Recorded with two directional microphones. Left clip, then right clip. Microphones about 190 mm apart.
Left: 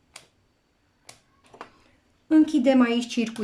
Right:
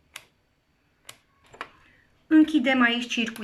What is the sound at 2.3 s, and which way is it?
Speech, 25° left (ahead or behind).